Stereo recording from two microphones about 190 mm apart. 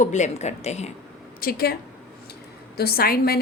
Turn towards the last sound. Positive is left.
turn(degrees=55)  # may be behind; listen again after turning